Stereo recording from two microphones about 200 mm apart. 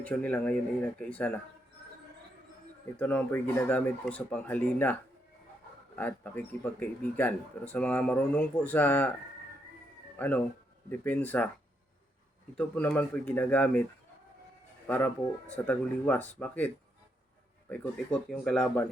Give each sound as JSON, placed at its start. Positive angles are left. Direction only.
{"t": 0.0, "sound": "speech", "side_deg": 5}
{"t": 3.0, "sound": "speech", "side_deg": 10}
{"t": 6.0, "sound": "speech", "side_deg": 10}
{"t": 10.2, "sound": "speech", "side_deg": 10}
{"t": 12.5, "sound": "speech", "side_deg": 5}
{"t": 14.8, "sound": "speech", "side_deg": 10}